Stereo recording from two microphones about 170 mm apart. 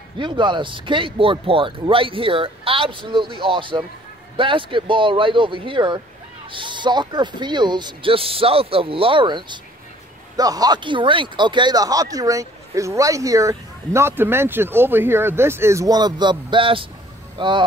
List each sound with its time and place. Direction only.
0.2 s speech: 30° right (ahead or behind)